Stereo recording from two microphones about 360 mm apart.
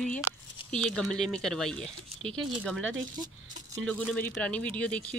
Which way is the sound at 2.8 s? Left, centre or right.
Right.